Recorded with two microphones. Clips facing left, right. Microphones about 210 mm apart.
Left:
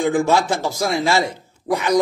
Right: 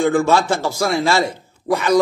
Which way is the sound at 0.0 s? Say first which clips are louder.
Right 2 dB; 20° left (ahead or behind).